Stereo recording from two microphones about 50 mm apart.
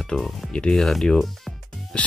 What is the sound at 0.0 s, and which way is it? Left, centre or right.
Speech, centre.